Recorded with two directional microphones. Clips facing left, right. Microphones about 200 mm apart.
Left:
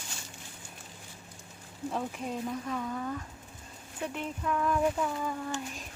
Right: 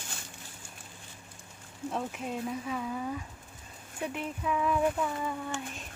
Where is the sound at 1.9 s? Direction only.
Centre (ahead or behind).